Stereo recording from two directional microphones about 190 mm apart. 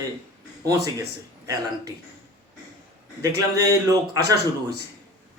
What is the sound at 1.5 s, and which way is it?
Speech, 15° right (ahead or behind).